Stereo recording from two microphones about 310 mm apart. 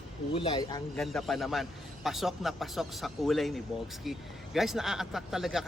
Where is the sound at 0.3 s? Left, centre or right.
Centre.